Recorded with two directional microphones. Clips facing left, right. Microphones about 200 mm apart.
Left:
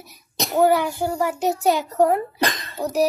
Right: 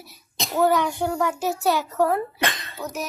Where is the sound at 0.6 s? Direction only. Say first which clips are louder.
Left 2 dB; 10° left (ahead or behind).